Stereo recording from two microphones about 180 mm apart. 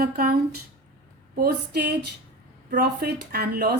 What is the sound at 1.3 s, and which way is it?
A woman's voice, 60° right (ahead or behind).